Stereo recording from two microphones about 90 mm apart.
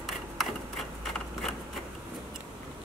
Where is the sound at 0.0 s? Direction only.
Centre (ahead or behind).